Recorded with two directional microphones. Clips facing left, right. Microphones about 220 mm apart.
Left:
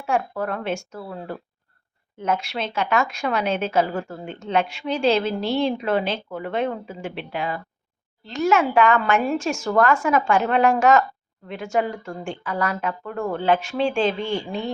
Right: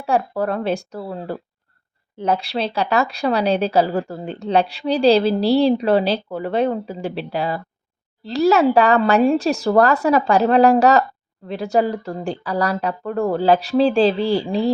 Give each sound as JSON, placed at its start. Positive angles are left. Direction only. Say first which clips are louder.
{"t": 0.0, "sound": "a woman's voice", "louder": "right 4 dB", "side_deg": -35}